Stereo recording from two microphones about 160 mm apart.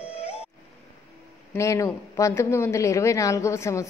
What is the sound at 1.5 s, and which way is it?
A woman's voice, 20° left (ahead or behind).